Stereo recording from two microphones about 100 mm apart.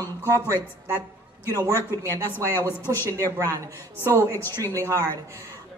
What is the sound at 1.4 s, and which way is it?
Speech, 25° right (ahead or behind).